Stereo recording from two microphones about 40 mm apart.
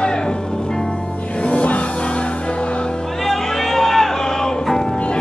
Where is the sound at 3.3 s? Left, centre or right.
Centre.